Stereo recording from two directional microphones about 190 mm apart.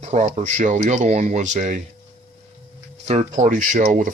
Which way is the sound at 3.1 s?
35° right (ahead or behind).